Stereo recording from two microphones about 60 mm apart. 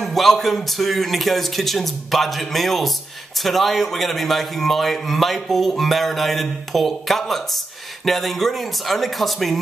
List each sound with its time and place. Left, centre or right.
0.0 s a man's voice: centre